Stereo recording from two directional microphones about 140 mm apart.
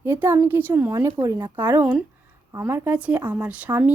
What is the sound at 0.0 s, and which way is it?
A woman's voice, 20° right (ahead or behind).